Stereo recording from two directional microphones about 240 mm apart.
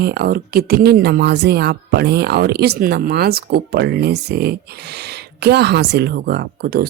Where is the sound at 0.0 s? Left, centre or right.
Right.